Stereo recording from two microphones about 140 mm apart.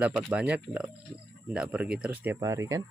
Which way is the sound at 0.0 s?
5° right (ahead or behind).